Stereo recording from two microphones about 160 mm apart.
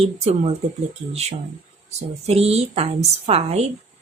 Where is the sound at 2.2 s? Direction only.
40° right (ahead or behind).